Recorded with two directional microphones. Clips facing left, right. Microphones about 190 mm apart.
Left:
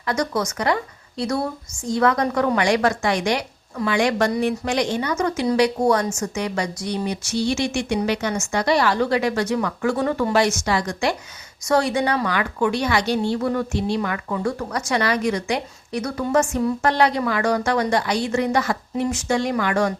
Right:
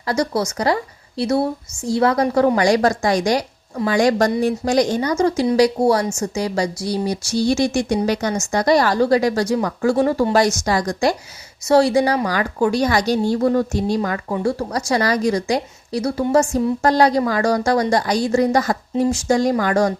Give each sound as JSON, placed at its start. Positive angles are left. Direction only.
{"t": 0.0, "sound": "a woman's voice", "side_deg": -30}